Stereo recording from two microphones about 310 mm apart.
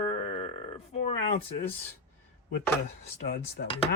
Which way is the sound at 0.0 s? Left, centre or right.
Centre.